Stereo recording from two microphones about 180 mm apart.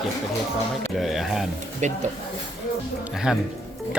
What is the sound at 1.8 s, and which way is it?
Speech, 40° right (ahead or behind).